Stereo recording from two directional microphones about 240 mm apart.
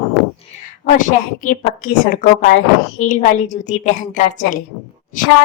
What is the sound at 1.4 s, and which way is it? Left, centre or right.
A woman's voice, left.